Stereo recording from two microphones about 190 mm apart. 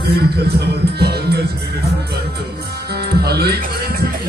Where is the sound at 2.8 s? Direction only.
55° right (ahead or behind).